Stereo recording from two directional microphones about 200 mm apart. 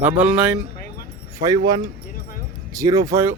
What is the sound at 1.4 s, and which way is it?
Speech, 20° right (ahead or behind).